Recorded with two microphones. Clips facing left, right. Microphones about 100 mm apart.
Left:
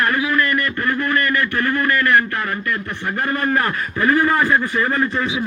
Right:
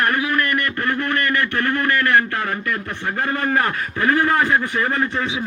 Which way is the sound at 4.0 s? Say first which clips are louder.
Left 1 dB; 70° right (ahead or behind).